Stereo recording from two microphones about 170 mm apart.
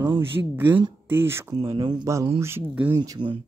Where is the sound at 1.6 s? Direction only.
30° right (ahead or behind).